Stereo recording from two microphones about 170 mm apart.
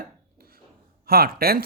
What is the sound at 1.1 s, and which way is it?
Speech, 65° right (ahead or behind).